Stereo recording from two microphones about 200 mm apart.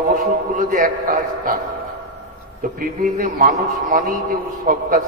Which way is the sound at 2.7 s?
40° right (ahead or behind).